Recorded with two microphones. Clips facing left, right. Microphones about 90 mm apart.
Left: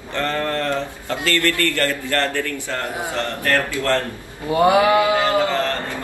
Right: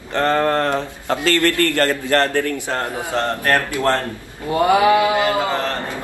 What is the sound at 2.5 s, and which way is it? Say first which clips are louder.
Speech: right 3 dB; 20° right (ahead or behind).